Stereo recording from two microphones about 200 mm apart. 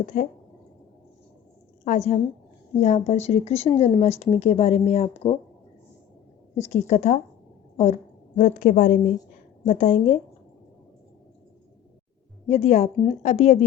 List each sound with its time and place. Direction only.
0.0 s speech: 40° left (ahead or behind)
1.8 s speech: 35° left (ahead or behind)
6.6 s speech: 35° left (ahead or behind)
8.4 s speech: 40° left (ahead or behind)
12.5 s speech: 30° left (ahead or behind)